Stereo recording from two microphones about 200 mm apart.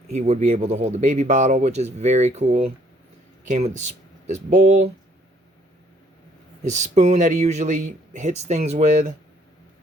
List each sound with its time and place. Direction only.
0.1 s speech: 35° right (ahead or behind)
6.7 s speech: 35° right (ahead or behind)